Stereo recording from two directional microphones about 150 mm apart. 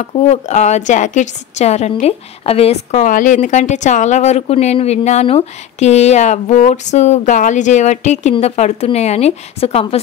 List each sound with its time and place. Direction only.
0.0 s a woman's voice: 50° left (ahead or behind)